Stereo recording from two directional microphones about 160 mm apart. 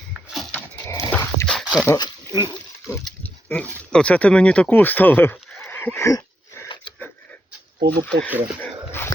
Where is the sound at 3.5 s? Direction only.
10° left (ahead or behind).